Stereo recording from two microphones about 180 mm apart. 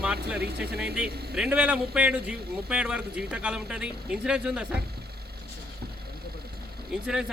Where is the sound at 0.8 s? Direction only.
5° right (ahead or behind).